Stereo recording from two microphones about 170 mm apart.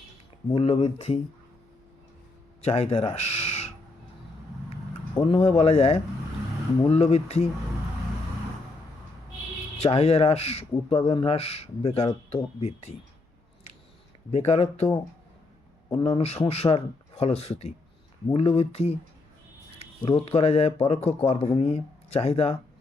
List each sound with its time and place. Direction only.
0.5 s speech: 35° left (ahead or behind)
2.6 s speech: 40° left (ahead or behind)
5.1 s speech: 25° left (ahead or behind)
9.8 s speech: 40° left (ahead or behind)
14.3 s speech: 40° left (ahead or behind)
16.0 s speech: 30° left (ahead or behind)